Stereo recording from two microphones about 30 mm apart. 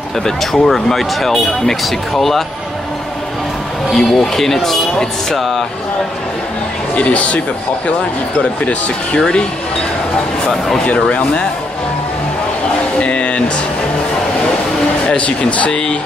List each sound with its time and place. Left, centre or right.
0.2 s speech: centre
3.9 s speech: centre
7.0 s speech: left
10.9 s speech: left
13.0 s a sound: left
15.0 s speech: left
15.7 s speech: left